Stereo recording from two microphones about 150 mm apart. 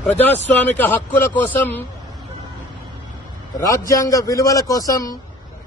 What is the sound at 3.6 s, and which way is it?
A man's voice, 20° left (ahead or behind).